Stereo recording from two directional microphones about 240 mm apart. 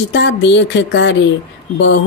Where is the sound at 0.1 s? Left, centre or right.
Left.